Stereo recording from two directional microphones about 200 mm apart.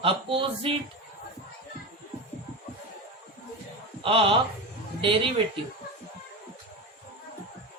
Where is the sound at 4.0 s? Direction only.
25° right (ahead or behind).